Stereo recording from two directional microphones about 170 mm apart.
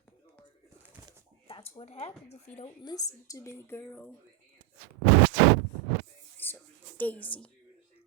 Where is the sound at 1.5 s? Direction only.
30° left (ahead or behind).